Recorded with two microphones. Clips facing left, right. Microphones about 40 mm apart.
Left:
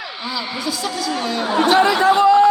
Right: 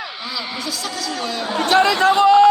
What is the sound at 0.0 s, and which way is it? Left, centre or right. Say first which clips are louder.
A man's voice: left 1 dB; centre.